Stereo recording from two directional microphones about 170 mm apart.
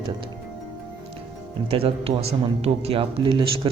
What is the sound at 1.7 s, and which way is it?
A man's voice, 35° right (ahead or behind).